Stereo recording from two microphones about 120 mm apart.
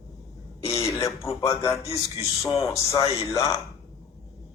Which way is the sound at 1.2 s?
25° left (ahead or behind).